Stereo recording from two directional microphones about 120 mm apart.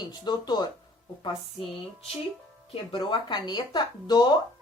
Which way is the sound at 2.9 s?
40° left (ahead or behind).